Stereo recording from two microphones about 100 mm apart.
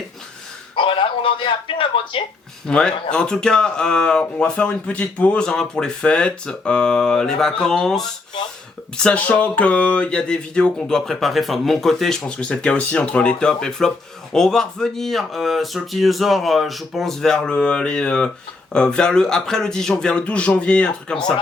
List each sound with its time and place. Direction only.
0.8 s a man's voice: 60° left (ahead or behind)
2.6 s speech: 10° left (ahead or behind)
9.0 s speech: 15° left (ahead or behind)